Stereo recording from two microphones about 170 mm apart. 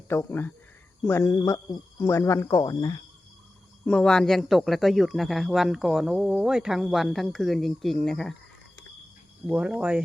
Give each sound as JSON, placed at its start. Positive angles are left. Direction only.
{"t": 0.1, "sound": "speech", "side_deg": 15}
{"t": 3.8, "sound": "speech", "side_deg": 5}
{"t": 9.5, "sound": "speech", "side_deg": -5}